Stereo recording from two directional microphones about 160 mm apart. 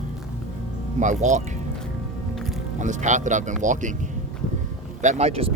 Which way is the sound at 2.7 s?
50° right (ahead or behind).